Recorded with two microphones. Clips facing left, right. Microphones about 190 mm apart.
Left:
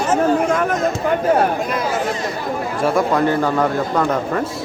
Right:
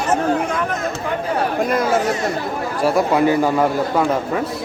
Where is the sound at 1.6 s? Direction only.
50° right (ahead or behind).